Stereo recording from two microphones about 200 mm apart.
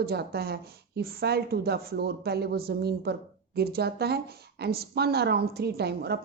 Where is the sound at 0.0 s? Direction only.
50° right (ahead or behind).